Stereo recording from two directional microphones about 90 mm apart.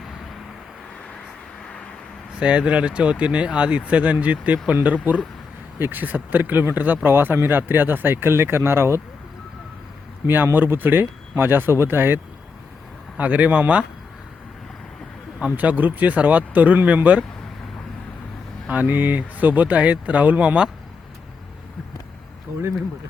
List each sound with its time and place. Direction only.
2.4 s speech: 10° right (ahead or behind); by 9.0 s 30° right (ahead or behind)
10.2 s speech: 20° right (ahead or behind)
15.4 s speech: 15° right (ahead or behind)
18.7 s speech: 20° right (ahead or behind)